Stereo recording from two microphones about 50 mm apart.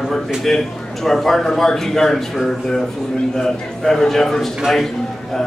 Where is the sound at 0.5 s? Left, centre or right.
Centre.